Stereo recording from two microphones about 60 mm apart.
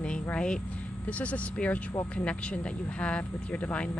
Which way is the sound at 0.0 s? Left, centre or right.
Centre.